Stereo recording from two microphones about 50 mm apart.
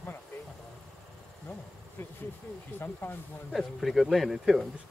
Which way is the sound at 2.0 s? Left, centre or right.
Left.